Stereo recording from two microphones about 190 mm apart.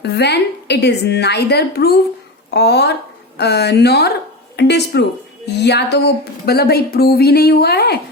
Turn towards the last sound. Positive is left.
turn(degrees=55)  # may be behind; listen again after turning